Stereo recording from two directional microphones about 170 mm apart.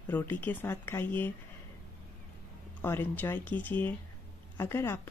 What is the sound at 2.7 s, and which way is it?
Speech, 10° left (ahead or behind).